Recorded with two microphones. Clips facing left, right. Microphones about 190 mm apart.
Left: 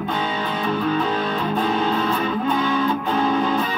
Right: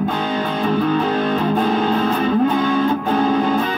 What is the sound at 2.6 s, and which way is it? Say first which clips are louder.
Music: right 4 dB; 45° right (ahead or behind).